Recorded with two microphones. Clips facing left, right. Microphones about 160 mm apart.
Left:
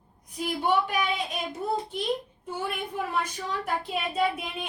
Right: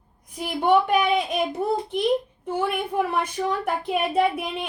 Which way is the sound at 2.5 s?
65° right (ahead or behind).